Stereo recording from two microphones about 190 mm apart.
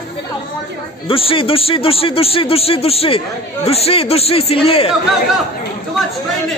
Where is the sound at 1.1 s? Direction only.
30° left (ahead or behind).